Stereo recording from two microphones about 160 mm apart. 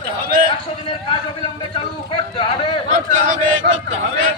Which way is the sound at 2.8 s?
55° right (ahead or behind).